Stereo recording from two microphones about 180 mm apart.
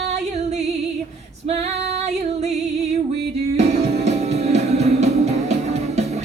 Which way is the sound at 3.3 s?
35° right (ahead or behind).